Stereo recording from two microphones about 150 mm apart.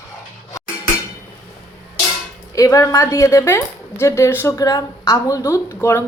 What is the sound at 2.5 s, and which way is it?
A woman's voice, 25° left (ahead or behind).